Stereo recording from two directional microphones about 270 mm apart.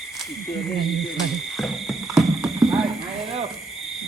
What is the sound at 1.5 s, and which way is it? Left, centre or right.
Frog, centre.